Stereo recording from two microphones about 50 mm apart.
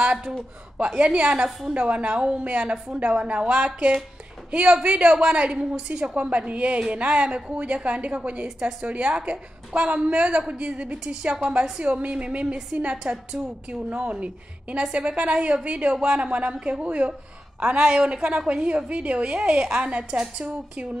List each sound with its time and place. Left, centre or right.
0.0 s a sound: centre
0.7 s a woman's voice: right
13.1 s a woman's voice: centre
13.7 s a woman's voice: right